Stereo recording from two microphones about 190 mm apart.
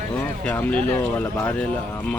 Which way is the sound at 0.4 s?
10° left (ahead or behind).